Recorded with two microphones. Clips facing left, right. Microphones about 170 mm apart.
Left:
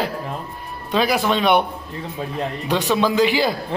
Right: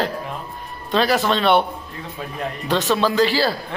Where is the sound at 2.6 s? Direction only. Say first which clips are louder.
Even; 10° left (ahead or behind).